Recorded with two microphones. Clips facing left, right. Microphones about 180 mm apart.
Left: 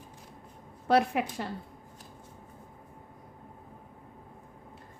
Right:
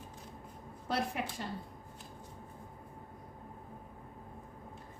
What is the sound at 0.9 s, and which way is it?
Speech, 70° left (ahead or behind).